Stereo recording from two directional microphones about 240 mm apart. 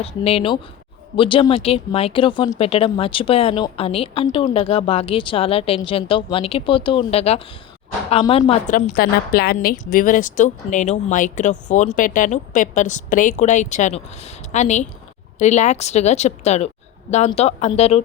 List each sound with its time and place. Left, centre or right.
0.0 s a woman's voice: left